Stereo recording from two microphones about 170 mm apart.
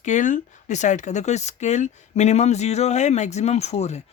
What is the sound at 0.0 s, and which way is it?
Speech, 45° left (ahead or behind).